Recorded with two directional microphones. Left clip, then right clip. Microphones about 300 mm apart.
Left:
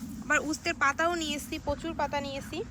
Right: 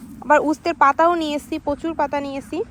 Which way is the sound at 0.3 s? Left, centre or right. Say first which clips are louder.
Right 12 dB; centre.